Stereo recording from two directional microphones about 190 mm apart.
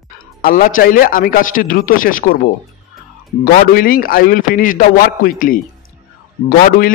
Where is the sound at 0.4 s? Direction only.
45° left (ahead or behind).